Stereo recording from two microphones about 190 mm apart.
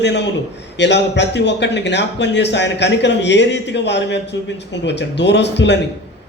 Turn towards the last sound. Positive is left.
turn(degrees=65)  # may be behind; listen again after turning